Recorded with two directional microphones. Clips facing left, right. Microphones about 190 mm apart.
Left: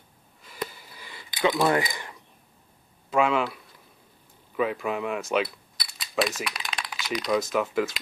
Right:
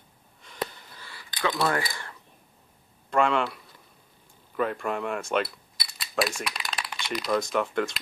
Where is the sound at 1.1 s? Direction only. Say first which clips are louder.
Left 4 dB; 20° left (ahead or behind).